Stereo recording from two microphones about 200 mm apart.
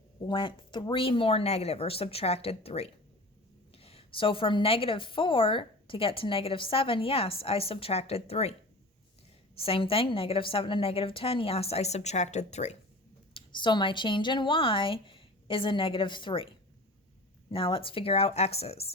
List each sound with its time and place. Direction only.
0.3 s a woman's voice: 25° left (ahead or behind)
9.6 s a woman's voice: 30° left (ahead or behind)
13.3 s a woman's voice: 25° left (ahead or behind)
17.5 s speech: 25° left (ahead or behind)